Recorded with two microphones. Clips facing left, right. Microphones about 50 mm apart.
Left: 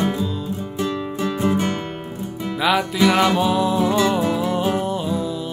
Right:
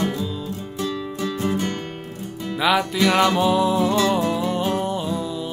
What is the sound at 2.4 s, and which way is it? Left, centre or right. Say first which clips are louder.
Music: even; centre.